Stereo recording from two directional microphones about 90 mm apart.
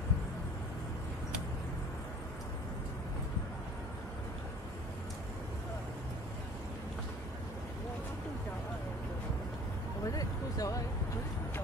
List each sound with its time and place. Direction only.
10.0 s vehicle: 40° left (ahead or behind)